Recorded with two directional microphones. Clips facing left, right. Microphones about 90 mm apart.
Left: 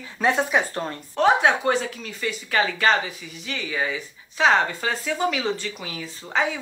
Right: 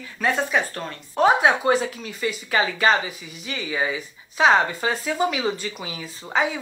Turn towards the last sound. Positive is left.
turn(degrees=-10)  # may be behind; listen again after turning